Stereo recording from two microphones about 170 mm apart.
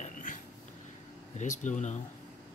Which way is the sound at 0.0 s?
50° left (ahead or behind).